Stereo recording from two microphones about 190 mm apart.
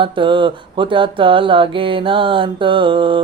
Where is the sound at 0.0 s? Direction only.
25° right (ahead or behind).